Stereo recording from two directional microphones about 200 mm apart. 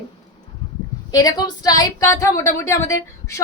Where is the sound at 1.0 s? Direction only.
20° left (ahead or behind).